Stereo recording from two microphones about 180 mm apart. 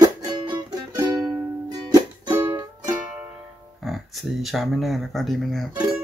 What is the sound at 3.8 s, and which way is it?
Speech, centre (ahead or behind).